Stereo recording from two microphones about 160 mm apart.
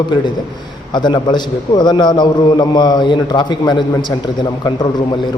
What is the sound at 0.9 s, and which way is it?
A man's voice, 30° left (ahead or behind).